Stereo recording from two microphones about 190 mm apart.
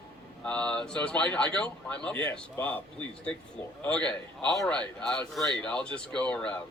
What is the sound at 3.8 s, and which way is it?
Speech, 5° left (ahead or behind).